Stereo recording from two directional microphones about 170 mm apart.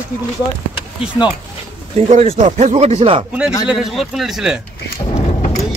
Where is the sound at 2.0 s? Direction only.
40° right (ahead or behind).